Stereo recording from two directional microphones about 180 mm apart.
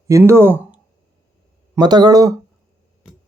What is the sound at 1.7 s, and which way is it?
Speech, 25° right (ahead or behind).